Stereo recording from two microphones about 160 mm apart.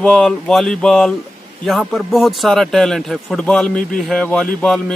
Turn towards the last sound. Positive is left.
turn(degrees=5)  # may be behind; listen again after turning